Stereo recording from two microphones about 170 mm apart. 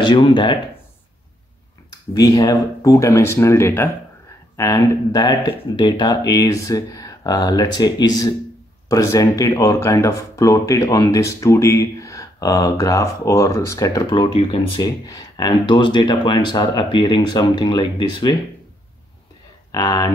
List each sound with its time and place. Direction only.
0.0 s speech: 25° left (ahead or behind)
1.9 s speech: 20° left (ahead or behind)
19.7 s speech: 20° left (ahead or behind)